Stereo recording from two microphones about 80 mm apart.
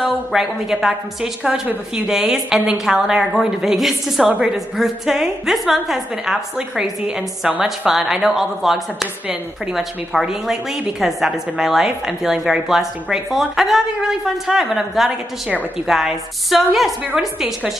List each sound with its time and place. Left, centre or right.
0.3 s a woman's voice: centre